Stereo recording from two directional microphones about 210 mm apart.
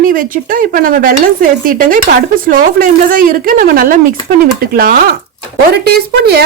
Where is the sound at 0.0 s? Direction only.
40° right (ahead or behind).